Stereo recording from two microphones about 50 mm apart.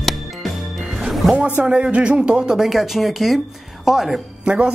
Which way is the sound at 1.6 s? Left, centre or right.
Right.